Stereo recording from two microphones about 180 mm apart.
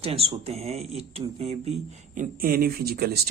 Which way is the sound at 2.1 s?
55° right (ahead or behind).